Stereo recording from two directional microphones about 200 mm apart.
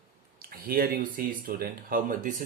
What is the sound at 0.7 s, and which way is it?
Speech, 45° right (ahead or behind).